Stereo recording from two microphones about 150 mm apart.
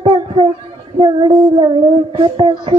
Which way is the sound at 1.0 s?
30° right (ahead or behind).